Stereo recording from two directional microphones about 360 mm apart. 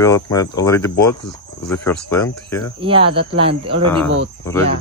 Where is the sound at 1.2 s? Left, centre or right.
Left.